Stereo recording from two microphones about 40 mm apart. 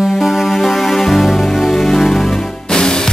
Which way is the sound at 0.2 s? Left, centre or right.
Centre.